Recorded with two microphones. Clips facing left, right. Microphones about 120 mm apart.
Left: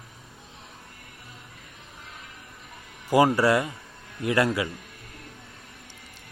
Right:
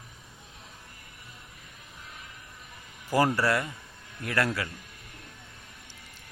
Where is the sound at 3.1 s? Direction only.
15° left (ahead or behind).